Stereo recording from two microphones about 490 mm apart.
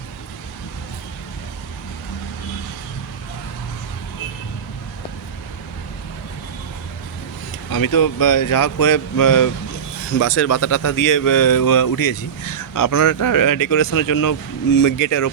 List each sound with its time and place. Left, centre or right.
7.7 s speech: left